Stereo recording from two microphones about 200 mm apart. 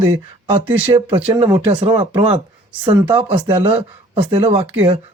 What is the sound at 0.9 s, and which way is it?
Speech, 25° right (ahead or behind).